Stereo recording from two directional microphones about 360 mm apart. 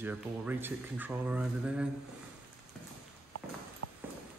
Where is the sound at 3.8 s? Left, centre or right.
Right.